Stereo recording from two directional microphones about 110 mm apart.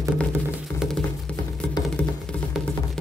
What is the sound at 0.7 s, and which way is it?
Music, 5° left (ahead or behind).